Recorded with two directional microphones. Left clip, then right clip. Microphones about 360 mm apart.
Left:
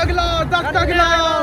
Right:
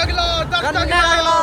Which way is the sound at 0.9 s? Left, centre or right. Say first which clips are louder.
Right 1 dB; centre.